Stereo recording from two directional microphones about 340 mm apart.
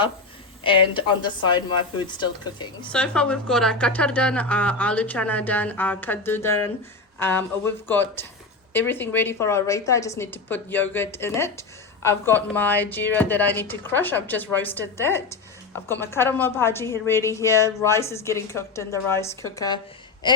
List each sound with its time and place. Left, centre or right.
0.6 s a woman's voice: centre